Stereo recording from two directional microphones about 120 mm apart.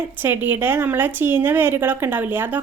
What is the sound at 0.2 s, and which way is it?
A woman's voice, 15° right (ahead or behind).